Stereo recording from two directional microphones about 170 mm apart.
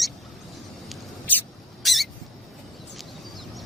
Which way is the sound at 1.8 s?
Centre (ahead or behind).